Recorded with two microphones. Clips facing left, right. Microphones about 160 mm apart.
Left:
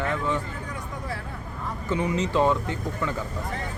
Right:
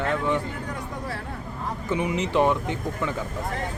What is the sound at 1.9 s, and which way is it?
Speech, 15° right (ahead or behind).